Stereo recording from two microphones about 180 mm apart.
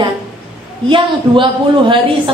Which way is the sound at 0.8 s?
25° right (ahead or behind).